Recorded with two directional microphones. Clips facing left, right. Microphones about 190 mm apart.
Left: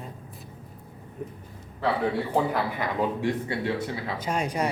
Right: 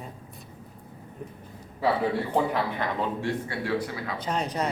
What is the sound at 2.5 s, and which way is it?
Speech, 10° left (ahead or behind).